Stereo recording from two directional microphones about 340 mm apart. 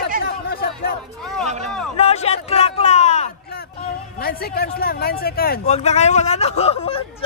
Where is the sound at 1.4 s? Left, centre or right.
Centre.